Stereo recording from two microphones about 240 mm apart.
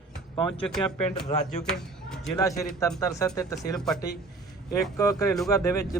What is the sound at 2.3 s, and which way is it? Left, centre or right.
Speech, centre.